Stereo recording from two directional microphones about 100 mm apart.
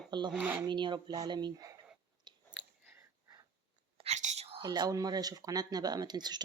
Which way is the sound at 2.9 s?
30° right (ahead or behind).